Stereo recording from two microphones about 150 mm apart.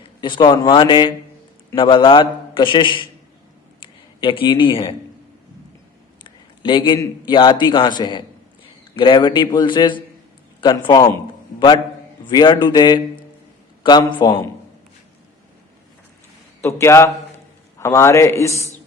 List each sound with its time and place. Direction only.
0.2 s a man's voice: 30° left (ahead or behind)
4.2 s a man's voice: 35° left (ahead or behind)
6.2 s a sound: 30° left (ahead or behind)
7.0 s a man's voice: 30° left (ahead or behind)
12.2 s a man's voice: 30° left (ahead or behind)
16.6 s a man's voice: 20° left (ahead or behind)